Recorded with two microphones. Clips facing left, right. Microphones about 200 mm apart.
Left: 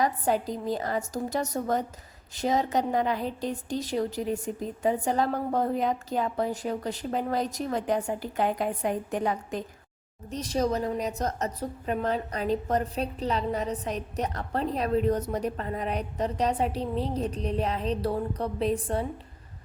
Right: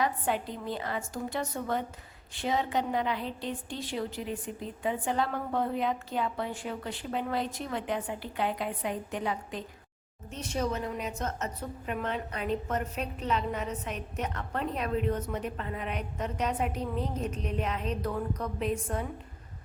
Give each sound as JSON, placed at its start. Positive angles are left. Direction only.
{"t": 0.0, "sound": "a woman's voice", "side_deg": 40}